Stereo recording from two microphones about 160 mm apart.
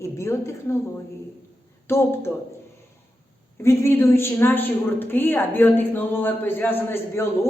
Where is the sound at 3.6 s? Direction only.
15° left (ahead or behind).